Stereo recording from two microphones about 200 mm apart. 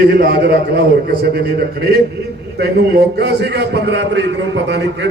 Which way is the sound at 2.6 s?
55° right (ahead or behind).